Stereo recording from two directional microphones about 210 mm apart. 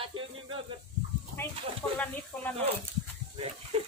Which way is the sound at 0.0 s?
25° right (ahead or behind).